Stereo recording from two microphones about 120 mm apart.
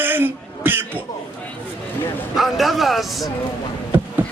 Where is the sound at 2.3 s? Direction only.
Centre (ahead or behind).